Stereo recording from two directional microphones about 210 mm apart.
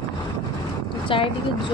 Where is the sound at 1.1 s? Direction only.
25° left (ahead or behind).